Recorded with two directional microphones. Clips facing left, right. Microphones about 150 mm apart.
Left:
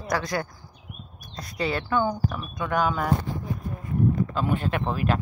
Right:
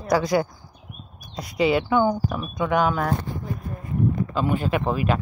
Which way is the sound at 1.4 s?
10° right (ahead or behind).